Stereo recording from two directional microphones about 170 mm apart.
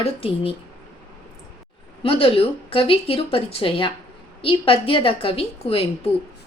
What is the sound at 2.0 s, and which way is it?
A woman's voice, 35° left (ahead or behind).